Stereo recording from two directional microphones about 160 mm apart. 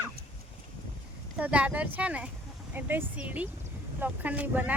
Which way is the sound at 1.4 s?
10° right (ahead or behind).